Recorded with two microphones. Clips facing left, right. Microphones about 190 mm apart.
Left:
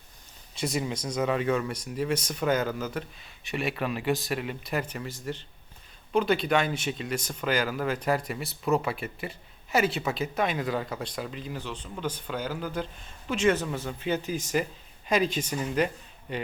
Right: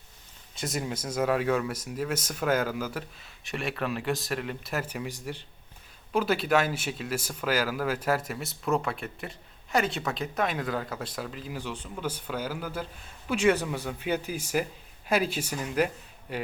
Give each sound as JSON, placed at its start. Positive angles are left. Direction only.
{"t": 0.5, "sound": "speech", "side_deg": 0}